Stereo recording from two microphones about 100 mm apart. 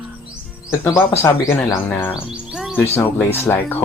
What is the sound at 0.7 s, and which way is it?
Speech, 25° left (ahead or behind).